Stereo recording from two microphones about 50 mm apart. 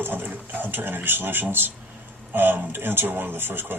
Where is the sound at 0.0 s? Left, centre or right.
Right.